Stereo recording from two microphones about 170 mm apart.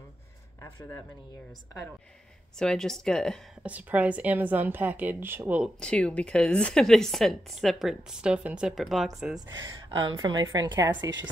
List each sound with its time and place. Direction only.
0.6 s speech: 15° left (ahead or behind)
2.6 s a woman's voice: 5° left (ahead or behind)
3.6 s a woman's voice: 10° right (ahead or behind)
5.8 s a woman's voice: 5° left (ahead or behind)
9.6 s a woman's voice: 25° right (ahead or behind)